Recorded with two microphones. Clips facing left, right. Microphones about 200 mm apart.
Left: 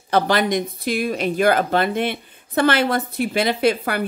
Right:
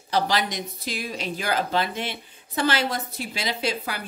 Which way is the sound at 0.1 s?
55° left (ahead or behind).